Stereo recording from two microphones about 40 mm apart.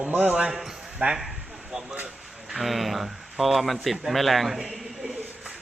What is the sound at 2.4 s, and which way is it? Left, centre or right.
Speech, centre.